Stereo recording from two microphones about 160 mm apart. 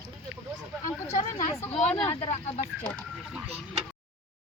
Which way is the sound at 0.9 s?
20° left (ahead or behind).